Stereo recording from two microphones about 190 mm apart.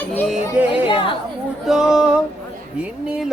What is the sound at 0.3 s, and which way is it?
Speech, 10° right (ahead or behind).